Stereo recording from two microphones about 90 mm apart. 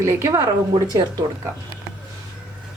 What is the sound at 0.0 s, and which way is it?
Speech, 35° right (ahead or behind).